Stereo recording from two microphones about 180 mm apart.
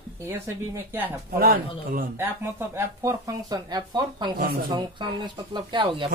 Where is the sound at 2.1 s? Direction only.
10° right (ahead or behind).